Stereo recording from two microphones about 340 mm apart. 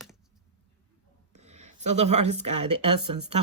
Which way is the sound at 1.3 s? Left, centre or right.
Centre.